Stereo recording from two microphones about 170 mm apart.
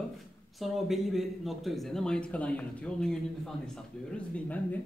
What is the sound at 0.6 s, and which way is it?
Speech, centre (ahead or behind).